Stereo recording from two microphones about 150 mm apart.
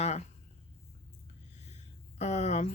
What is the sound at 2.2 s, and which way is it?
Speech, 50° left (ahead or behind).